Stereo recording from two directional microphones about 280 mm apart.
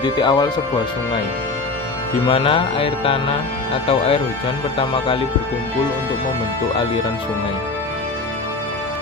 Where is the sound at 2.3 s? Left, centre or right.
Centre.